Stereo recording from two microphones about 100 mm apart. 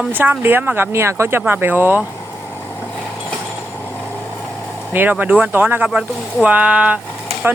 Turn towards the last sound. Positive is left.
turn(degrees=-10)  # may be behind; listen again after turning